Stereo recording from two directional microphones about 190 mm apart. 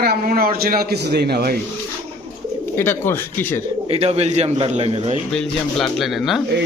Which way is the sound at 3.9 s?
30° right (ahead or behind).